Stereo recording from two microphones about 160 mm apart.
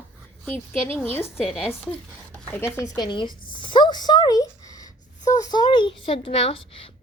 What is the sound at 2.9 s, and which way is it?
Speech, 25° left (ahead or behind).